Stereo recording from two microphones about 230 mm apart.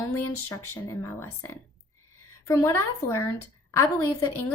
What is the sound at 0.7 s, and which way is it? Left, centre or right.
A woman's voice, centre.